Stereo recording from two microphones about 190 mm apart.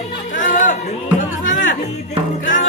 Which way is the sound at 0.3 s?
45° left (ahead or behind).